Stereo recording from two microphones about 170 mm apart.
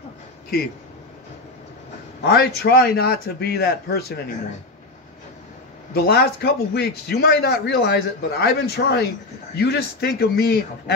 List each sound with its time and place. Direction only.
2.2 s a man's voice: 70° left (ahead or behind)
5.9 s a man's voice: 70° left (ahead or behind)